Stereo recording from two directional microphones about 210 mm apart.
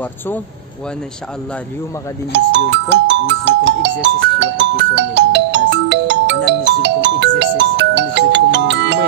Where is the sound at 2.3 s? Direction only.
55° right (ahead or behind).